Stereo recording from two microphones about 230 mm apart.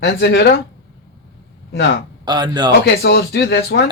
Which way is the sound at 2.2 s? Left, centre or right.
Centre.